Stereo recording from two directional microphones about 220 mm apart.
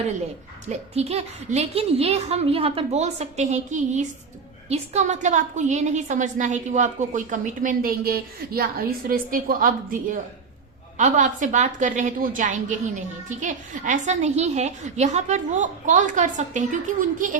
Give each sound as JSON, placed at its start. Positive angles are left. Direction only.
{"t": 0.7, "sound": "a child's voice", "side_deg": -30}